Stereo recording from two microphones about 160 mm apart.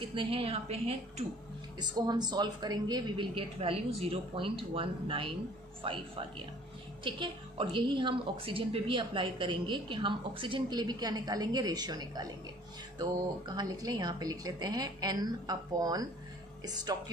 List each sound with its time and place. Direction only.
0.0 s a woman's voice: 30° right (ahead or behind)
1.8 s a woman's voice: 25° right (ahead or behind)